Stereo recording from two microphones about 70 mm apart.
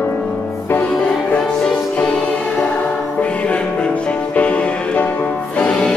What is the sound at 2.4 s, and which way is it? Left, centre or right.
Music, left.